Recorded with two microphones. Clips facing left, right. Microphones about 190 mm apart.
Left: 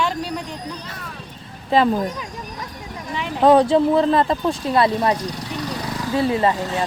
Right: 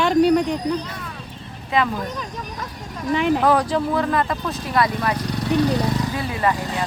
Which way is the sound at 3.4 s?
25° left (ahead or behind).